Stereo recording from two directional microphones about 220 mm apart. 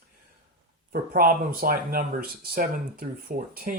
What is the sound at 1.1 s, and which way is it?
Speech, 40° right (ahead or behind).